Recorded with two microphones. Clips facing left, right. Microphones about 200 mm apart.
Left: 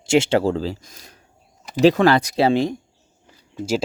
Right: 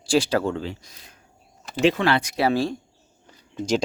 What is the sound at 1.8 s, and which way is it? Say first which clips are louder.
Speech: left 6 dB; 40° left (ahead or behind).